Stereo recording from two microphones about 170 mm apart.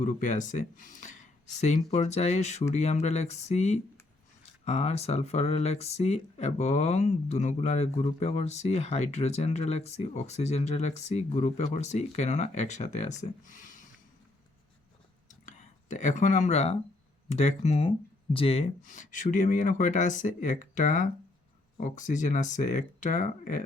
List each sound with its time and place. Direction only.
0.0 s speech: 45° left (ahead or behind)
15.3 s a sound: 45° left (ahead or behind)
17.2 s speech: 40° left (ahead or behind)
18.8 s speech: 50° left (ahead or behind)